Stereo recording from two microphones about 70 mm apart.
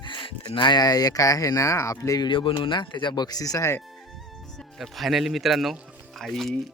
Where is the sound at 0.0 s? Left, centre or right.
Left.